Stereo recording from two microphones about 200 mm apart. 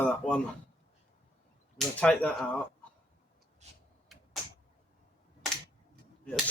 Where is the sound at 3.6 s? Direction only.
35° right (ahead or behind).